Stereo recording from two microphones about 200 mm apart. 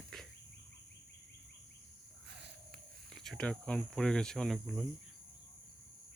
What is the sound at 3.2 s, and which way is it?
Speech, 5° left (ahead or behind).